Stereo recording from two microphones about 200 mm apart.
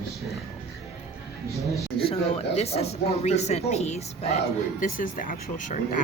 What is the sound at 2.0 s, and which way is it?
Speech, 30° left (ahead or behind).